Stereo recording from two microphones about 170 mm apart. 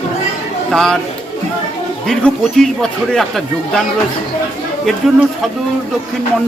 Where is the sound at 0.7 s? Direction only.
5° left (ahead or behind).